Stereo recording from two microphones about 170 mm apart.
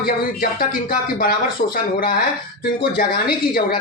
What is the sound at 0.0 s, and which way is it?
Speech, 55° left (ahead or behind).